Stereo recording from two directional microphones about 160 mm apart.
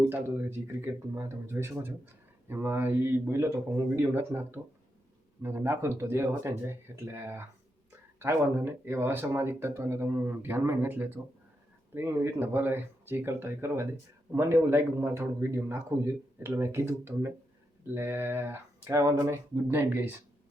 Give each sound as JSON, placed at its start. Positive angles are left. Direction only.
{"t": 0.1, "sound": "speech", "side_deg": -15}